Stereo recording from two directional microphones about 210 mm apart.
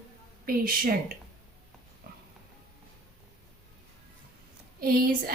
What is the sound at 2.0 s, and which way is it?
Pig, 45° right (ahead or behind).